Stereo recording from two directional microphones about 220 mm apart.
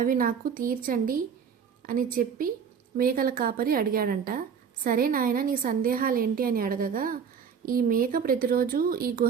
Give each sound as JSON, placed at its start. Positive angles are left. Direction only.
{"t": 0.0, "sound": "a woman's voice", "side_deg": -40}